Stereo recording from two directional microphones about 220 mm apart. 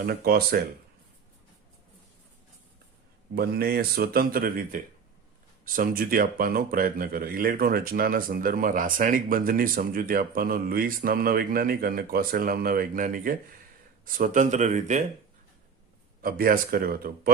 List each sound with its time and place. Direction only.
0.0 s speech: 45° right (ahead or behind)
3.3 s speech: 45° right (ahead or behind)
16.2 s speech: 40° right (ahead or behind)